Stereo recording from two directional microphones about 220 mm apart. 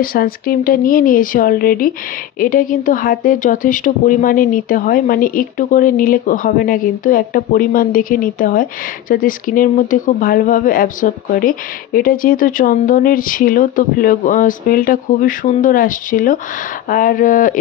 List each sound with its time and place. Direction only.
0.0 s speech: 40° left (ahead or behind)